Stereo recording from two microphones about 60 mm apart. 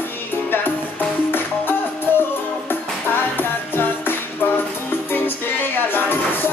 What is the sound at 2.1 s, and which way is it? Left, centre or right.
Music, left.